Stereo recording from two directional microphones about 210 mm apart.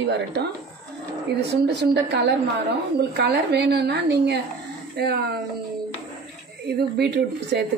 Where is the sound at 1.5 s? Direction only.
55° right (ahead or behind).